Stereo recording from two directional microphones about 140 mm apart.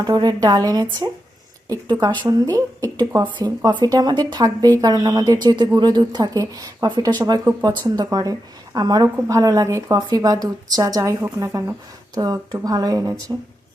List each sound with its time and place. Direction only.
0.0 s a woman's voice: 30° right (ahead or behind)